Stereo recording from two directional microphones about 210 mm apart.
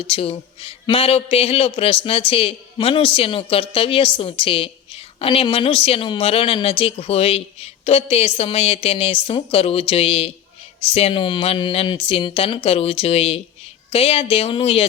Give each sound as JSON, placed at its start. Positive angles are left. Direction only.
{"t": 0.0, "sound": "a man's voice", "side_deg": 25}